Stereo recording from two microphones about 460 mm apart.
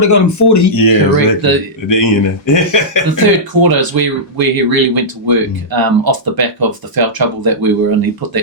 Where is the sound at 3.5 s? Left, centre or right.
Right.